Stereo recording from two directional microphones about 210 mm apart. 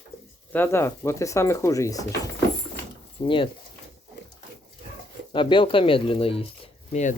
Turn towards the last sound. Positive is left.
turn(degrees=30)  # may be behind; listen again after turning